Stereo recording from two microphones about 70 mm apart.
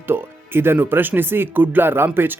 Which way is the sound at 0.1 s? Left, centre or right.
Right.